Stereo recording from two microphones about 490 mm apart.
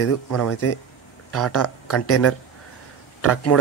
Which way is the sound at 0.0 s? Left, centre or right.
Left.